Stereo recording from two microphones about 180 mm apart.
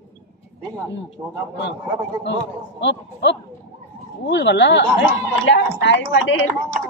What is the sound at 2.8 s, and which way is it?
Speech, 80° left.